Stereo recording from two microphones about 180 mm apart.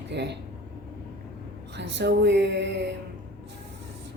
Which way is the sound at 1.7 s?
75° right (ahead or behind).